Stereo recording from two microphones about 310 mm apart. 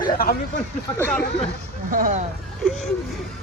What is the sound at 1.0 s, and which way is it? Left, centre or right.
Speech, centre.